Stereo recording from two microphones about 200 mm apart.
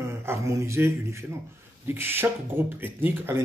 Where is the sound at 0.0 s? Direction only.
15° right (ahead or behind).